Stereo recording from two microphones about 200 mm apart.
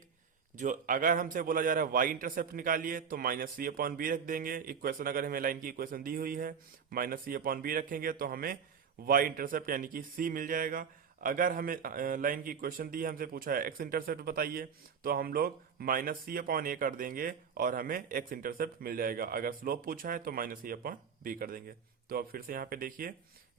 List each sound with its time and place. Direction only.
0.5 s a man's voice: 40° right (ahead or behind)